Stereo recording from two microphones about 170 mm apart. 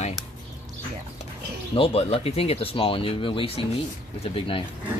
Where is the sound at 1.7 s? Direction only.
35° left (ahead or behind).